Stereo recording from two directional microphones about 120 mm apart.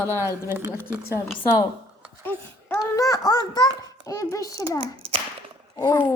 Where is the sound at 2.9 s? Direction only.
30° left (ahead or behind).